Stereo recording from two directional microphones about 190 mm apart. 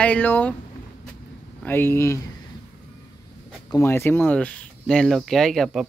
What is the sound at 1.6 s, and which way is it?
Speech, 10° left (ahead or behind).